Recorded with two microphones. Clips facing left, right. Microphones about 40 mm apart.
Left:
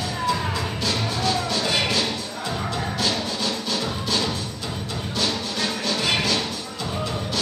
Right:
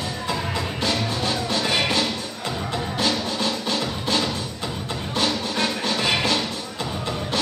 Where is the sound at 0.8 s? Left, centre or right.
Right.